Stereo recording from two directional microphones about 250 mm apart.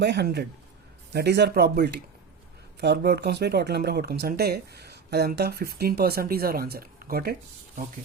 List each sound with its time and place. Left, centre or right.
0.0 s speech: right